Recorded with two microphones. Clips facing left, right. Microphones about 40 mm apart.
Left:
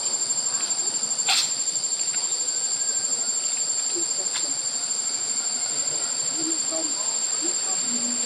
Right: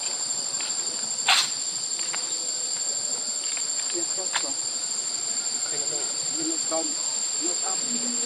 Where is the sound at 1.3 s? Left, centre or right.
Right.